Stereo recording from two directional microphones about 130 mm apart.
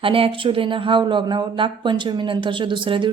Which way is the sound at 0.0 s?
45° right (ahead or behind).